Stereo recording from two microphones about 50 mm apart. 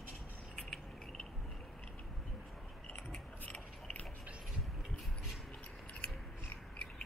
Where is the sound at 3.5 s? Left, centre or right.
Left.